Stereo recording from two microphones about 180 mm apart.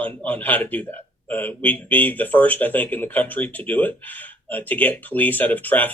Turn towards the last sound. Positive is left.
turn(degrees=10)  # may be behind; listen again after turning